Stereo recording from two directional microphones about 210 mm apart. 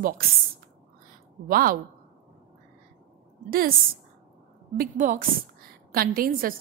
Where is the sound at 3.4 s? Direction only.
45° right (ahead or behind).